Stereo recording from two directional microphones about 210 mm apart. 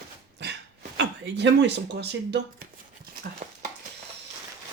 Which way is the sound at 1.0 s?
55° right (ahead or behind).